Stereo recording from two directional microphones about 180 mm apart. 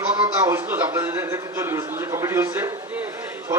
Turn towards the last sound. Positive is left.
turn(degrees=-10)  # may be behind; listen again after turning